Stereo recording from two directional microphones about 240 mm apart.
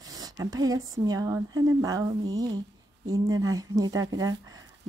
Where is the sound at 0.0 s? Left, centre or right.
Centre.